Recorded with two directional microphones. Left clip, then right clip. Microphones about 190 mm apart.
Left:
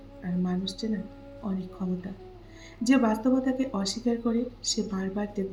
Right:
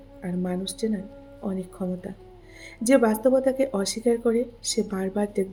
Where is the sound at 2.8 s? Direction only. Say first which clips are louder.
Right 5 dB; 50° right (ahead or behind).